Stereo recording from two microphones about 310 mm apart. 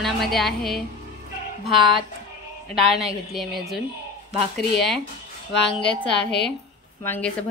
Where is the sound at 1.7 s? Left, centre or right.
Centre.